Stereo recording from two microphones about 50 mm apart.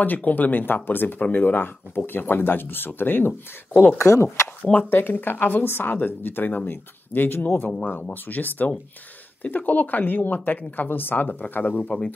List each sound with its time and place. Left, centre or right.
0.0 s speech: left
4.0 s speech: left
4.7 s speech: left